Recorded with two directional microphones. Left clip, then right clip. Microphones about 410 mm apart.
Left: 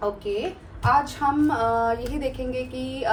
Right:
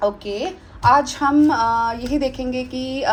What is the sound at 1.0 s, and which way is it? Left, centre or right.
A woman's voice, right.